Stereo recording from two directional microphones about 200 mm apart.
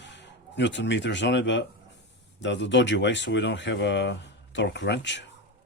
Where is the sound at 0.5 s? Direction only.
60° left (ahead or behind).